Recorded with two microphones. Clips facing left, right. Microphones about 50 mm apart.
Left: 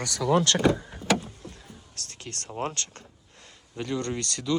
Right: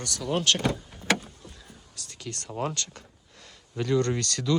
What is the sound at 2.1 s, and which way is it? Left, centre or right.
Speech, left.